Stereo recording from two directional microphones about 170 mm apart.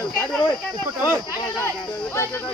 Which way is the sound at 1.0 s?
25° left (ahead or behind).